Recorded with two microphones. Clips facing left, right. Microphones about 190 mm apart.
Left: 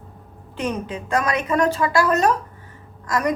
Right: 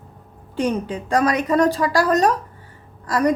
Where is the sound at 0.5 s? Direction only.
30° right (ahead or behind).